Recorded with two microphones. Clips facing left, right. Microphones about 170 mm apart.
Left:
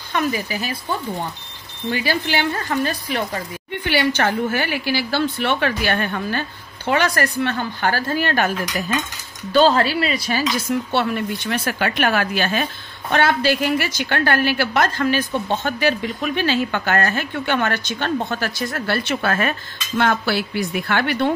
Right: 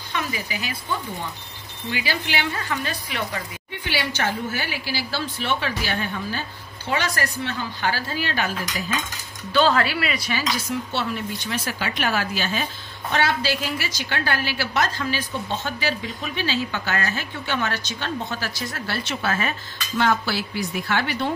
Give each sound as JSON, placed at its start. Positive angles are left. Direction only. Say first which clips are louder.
{"t": 0.1, "sound": "speech", "louder": "left 7 dB", "side_deg": 40}
{"t": 1.9, "sound": "speech", "louder": "left 6 dB", "side_deg": 40}
{"t": 3.8, "sound": "a woman's voice", "louder": "left 7 dB", "side_deg": 60}
{"t": 9.5, "sound": "speech", "louder": "left 4 dB", "side_deg": 35}
{"t": 10.9, "sound": "a woman's voice", "louder": "left 6 dB", "side_deg": 60}